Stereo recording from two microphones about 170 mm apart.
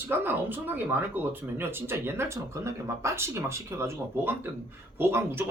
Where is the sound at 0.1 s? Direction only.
10° right (ahead or behind).